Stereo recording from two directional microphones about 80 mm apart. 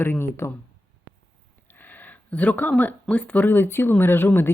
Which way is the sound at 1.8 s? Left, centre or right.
Left.